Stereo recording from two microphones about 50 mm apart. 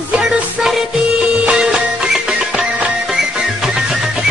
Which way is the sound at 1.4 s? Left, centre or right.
Centre.